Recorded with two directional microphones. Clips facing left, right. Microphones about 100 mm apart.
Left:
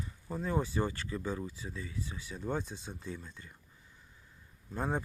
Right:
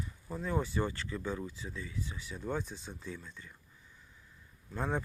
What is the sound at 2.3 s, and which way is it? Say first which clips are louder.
Speech: left 1 dB; 20° left (ahead or behind).